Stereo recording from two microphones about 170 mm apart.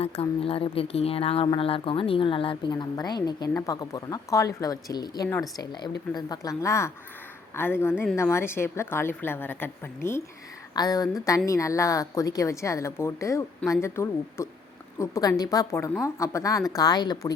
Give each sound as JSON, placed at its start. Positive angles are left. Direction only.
{"t": 0.0, "sound": "a woman's voice", "side_deg": 35}